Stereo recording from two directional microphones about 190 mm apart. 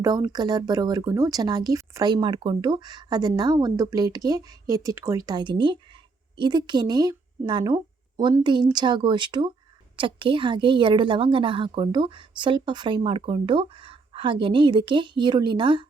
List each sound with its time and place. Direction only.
0.0 s speech: 20° right (ahead or behind)